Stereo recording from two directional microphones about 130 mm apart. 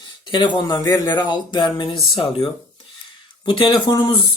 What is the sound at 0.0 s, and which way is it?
Speech, 35° left (ahead or behind).